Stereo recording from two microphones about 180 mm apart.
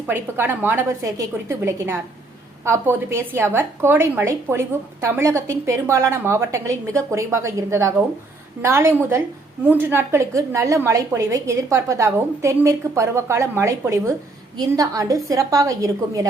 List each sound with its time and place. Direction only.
0.1 s a woman's voice: 10° right (ahead or behind)